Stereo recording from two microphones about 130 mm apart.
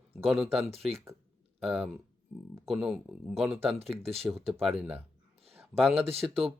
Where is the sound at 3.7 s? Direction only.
50° right (ahead or behind).